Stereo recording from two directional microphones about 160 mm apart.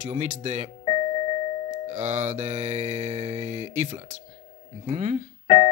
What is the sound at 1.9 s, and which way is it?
Speech, 45° right (ahead or behind).